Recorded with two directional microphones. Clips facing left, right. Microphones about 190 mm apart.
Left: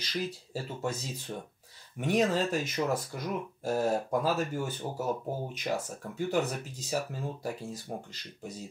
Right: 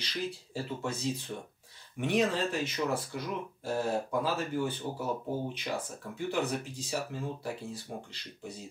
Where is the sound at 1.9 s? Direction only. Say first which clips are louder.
Left 2 dB; 40° left (ahead or behind).